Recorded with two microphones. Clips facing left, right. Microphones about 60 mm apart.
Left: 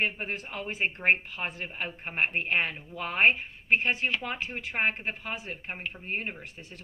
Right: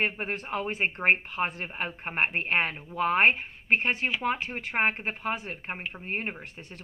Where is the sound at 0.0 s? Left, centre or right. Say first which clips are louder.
Right 1 dB; right.